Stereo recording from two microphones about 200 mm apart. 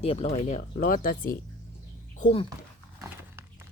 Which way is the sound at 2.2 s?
30° left (ahead or behind).